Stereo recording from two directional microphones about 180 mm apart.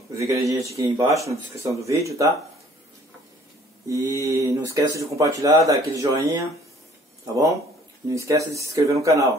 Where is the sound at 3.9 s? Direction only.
15° right (ahead or behind).